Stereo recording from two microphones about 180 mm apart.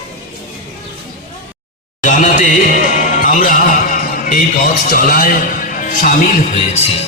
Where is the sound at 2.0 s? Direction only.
45° left (ahead or behind).